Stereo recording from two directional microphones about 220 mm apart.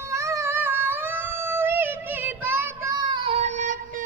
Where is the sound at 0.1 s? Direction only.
15° right (ahead or behind).